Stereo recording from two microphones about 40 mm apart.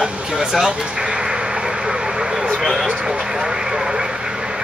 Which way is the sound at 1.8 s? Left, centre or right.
Centre.